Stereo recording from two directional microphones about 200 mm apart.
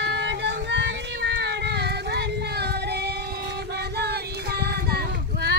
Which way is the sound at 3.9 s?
55° right (ahead or behind).